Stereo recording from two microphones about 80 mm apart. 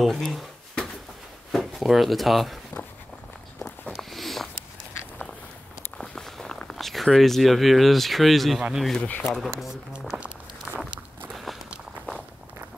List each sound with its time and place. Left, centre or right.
0.0 s drawer open or close: centre
1.5 s speech: centre
3.9 s a sound: centre
5.9 s a sound: centre
8.7 s speech: centre
9.0 s speech: left
10.1 s walk: centre